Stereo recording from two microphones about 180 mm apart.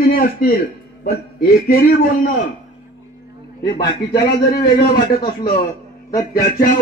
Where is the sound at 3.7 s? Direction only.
20° left (ahead or behind).